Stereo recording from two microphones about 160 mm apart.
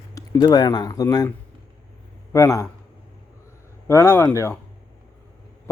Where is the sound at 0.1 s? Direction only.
25° left (ahead or behind).